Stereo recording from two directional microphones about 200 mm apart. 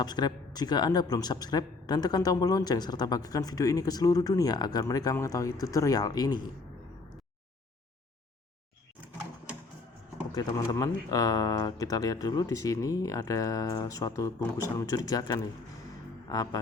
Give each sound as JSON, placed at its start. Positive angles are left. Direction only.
{"t": 0.0, "sound": "speech", "side_deg": 20}
{"t": 10.3, "sound": "speech", "side_deg": 15}